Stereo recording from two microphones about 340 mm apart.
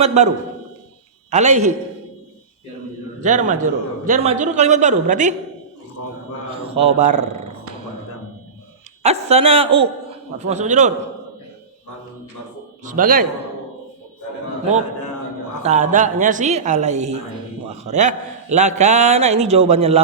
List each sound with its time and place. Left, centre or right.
0.0 s a man's voice: centre
1.3 s a man's voice: centre
3.2 s a man's voice: right
6.5 s a man's voice: centre
9.0 s a man's voice: centre
12.8 s a man's voice: right
15.6 s a man's voice: right